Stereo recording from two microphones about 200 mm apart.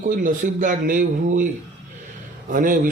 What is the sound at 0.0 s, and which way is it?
Speech, 40° right (ahead or behind).